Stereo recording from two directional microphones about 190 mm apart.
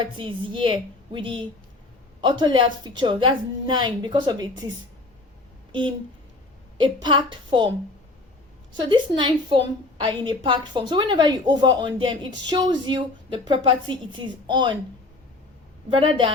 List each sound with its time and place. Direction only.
0.0 s a woman's voice: 25° right (ahead or behind)
6.7 s a woman's voice: 25° right (ahead or behind)
8.7 s a woman's voice: 25° right (ahead or behind)
15.9 s a woman's voice: 25° right (ahead or behind)